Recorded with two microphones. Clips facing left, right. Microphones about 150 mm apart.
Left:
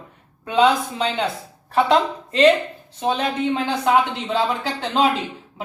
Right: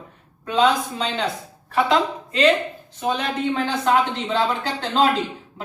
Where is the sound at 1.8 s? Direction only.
35° left (ahead or behind).